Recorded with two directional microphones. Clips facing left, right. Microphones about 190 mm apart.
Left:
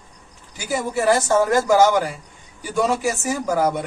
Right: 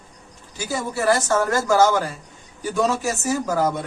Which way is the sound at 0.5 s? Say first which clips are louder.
Left 3 dB; 15° left (ahead or behind).